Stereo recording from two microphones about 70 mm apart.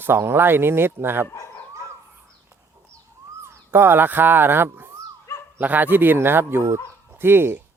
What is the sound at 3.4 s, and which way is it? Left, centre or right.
A man's voice, right.